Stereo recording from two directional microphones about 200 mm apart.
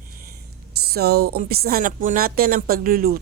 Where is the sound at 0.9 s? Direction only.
50° right (ahead or behind).